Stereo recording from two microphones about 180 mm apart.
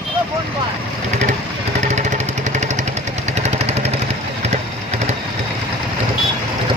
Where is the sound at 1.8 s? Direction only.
40° right (ahead or behind).